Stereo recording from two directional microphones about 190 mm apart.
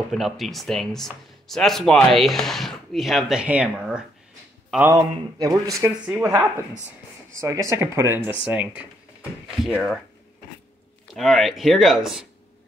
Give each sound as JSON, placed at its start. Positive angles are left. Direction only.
{"t": 0.1, "sound": "speech", "side_deg": 0}
{"t": 4.9, "sound": "speech", "side_deg": -20}
{"t": 11.1, "sound": "speech", "side_deg": 0}